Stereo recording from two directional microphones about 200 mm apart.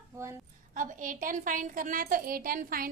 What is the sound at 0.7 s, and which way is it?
A woman's voice, 40° right (ahead or behind).